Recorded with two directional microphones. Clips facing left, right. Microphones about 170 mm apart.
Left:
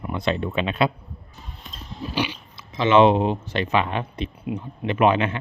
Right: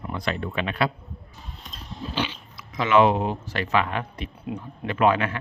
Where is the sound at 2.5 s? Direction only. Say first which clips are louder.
Left 3 dB; 25° left (ahead or behind).